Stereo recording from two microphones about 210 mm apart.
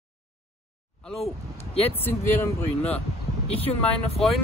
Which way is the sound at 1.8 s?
10° left (ahead or behind).